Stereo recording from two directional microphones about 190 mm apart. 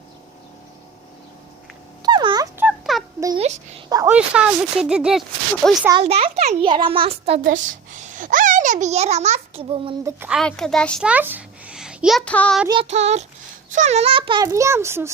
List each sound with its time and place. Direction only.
2.0 s fowl: 20° right (ahead or behind)
2.6 s a sound: 5° right (ahead or behind)
3.3 s a sound: 30° right (ahead or behind)
4.1 s speech: 5° right (ahead or behind)
6.0 s a child's voice: 30° right (ahead or behind)
7.4 s a sound: 45° right (ahead or behind); by 9.9 s 30° right (ahead or behind)
10.0 s speech: 15° right (ahead or behind)
10.2 s speech: centre (ahead or behind)
11.1 s a child's voice: 10° right (ahead or behind)
12.6 s a child's voice: 30° right (ahead or behind)